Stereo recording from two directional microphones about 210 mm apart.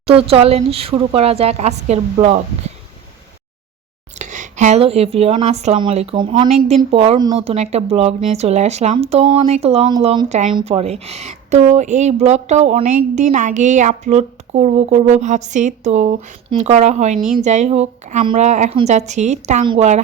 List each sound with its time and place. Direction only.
0.1 s speech: 25° right (ahead or behind)
4.2 s speech: 35° right (ahead or behind)